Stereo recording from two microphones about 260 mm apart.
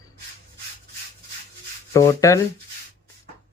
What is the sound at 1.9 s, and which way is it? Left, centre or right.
Speech, centre.